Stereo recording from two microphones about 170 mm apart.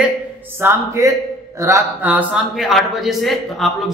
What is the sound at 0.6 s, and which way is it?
A man's voice, 15° right (ahead or behind).